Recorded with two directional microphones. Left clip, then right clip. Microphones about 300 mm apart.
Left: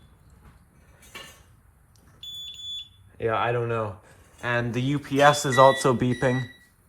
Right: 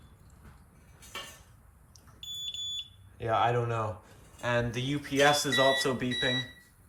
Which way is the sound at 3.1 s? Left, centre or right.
Centre.